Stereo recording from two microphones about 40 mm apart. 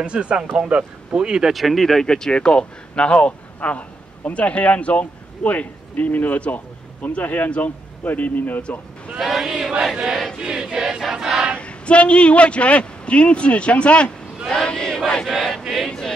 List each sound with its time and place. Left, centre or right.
0.0 s speech: right
1.5 s speech: centre
2.0 s chant: centre
2.3 s speech: left
9.2 s choir: centre
11.5 s a man's voice: left
14.5 s a sound: left
15.3 s chant: centre